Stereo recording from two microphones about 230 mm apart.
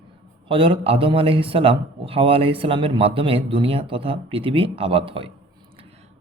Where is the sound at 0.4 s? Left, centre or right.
Right.